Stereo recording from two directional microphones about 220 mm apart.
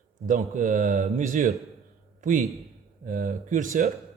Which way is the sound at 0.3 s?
35° right (ahead or behind).